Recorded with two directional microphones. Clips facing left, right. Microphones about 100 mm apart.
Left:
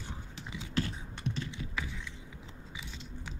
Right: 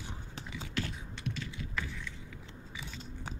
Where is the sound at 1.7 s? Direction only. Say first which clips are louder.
Right 1 dB; 15° left (ahead or behind).